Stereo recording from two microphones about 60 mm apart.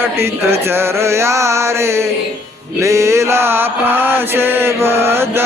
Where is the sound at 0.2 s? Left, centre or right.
Right.